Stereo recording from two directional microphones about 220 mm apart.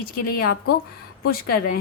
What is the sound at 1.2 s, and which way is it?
Speech, 45° left (ahead or behind).